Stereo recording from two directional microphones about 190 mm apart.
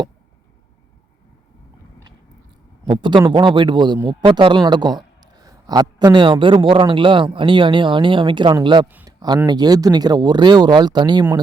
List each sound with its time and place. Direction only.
2.8 s speech: 25° right (ahead or behind)
8.9 s a sound: 10° right (ahead or behind)
9.5 s speech: 20° right (ahead or behind)